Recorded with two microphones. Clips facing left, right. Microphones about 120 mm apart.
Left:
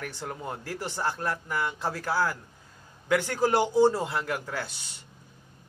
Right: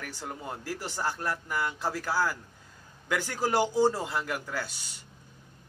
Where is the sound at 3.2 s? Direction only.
20° left (ahead or behind).